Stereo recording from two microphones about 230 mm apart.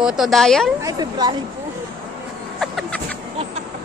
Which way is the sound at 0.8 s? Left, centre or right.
Centre.